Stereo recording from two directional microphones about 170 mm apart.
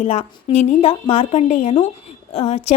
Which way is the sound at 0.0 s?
40° left (ahead or behind).